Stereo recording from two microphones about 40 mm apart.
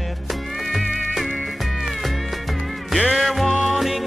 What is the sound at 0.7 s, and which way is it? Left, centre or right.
Music, centre.